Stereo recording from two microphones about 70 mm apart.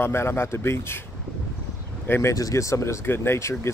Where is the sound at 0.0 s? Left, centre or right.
Left.